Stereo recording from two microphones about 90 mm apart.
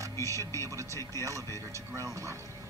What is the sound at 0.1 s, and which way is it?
Speech, 35° left (ahead or behind).